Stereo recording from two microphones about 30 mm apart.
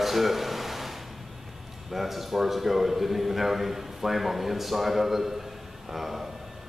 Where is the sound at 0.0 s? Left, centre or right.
Centre.